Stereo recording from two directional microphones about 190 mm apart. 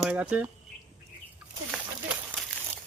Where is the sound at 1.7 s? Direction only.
Centre (ahead or behind).